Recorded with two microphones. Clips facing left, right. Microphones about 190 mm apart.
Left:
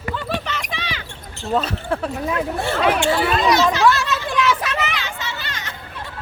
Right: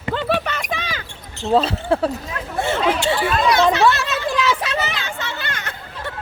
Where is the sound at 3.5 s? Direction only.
60° right (ahead or behind).